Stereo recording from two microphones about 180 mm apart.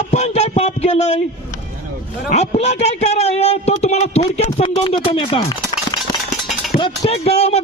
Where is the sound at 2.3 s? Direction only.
35° left (ahead or behind).